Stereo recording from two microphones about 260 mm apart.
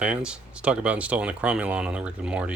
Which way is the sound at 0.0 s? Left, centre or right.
Centre.